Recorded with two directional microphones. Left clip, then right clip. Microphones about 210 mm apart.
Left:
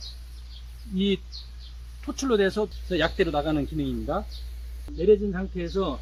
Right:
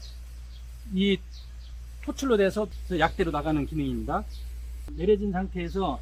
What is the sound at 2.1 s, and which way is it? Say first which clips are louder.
Speech: even; 30° right (ahead or behind).